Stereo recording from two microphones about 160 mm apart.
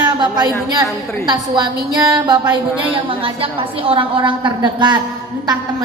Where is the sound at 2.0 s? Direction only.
25° right (ahead or behind).